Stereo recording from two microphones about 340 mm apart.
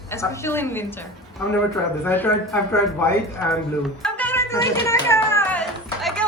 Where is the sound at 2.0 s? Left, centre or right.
Centre.